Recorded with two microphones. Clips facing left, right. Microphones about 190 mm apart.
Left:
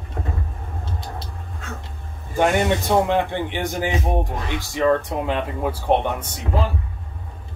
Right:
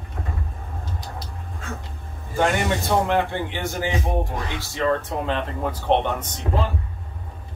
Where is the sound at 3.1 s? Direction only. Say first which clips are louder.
Left 1 dB; 15° left (ahead or behind).